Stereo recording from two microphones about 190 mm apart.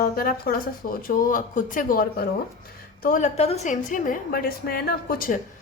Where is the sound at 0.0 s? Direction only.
50° left (ahead or behind).